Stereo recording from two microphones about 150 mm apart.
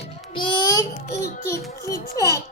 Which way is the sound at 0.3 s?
30° left (ahead or behind).